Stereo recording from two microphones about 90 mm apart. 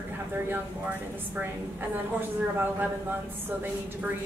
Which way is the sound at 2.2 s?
20° right (ahead or behind).